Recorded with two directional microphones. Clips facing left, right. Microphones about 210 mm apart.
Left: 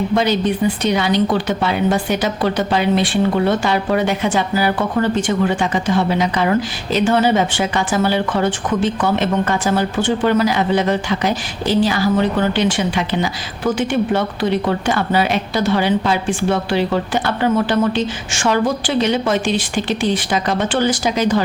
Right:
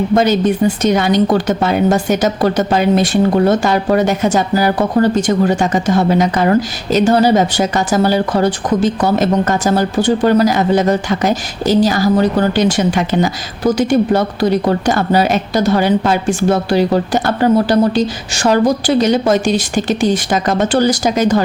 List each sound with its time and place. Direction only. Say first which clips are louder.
0.1 s speech: right 6 dB; 45° right (ahead or behind)